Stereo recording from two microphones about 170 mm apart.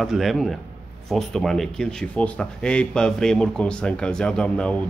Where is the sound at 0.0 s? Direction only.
Centre (ahead or behind).